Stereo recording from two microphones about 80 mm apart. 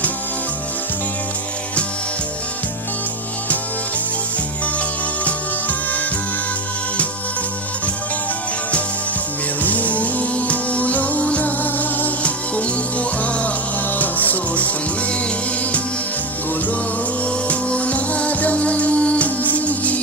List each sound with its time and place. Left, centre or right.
5.2 s music: centre
9.6 s music: centre
17.5 s music: centre